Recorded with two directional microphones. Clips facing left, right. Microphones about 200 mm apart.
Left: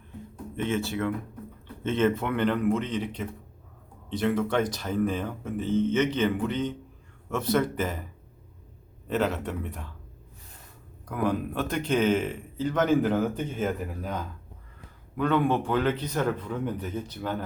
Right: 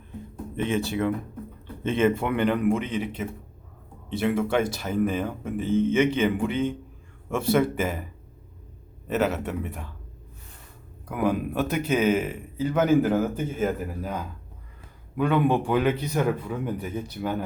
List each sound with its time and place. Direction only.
0.5 s speech: 15° right (ahead or behind)
9.0 s speech: 5° right (ahead or behind)
11.1 s speech: 10° right (ahead or behind)